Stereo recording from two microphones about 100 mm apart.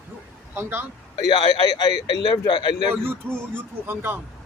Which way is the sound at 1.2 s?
40° left (ahead or behind).